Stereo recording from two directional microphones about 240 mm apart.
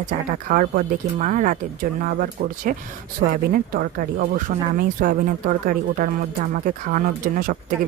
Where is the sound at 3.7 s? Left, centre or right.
Right.